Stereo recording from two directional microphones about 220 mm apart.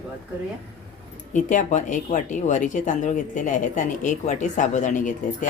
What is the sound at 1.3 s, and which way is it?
Speech, 35° left (ahead or behind).